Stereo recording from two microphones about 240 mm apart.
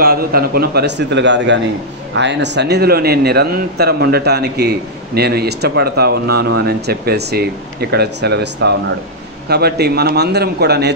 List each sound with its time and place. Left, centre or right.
0.0 s a man's voice: right